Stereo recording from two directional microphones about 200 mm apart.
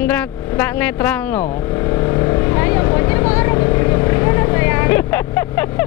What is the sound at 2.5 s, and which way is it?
Vehicle, 20° left (ahead or behind).